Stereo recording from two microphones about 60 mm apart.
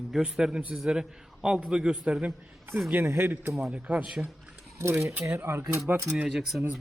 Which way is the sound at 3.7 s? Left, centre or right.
Right.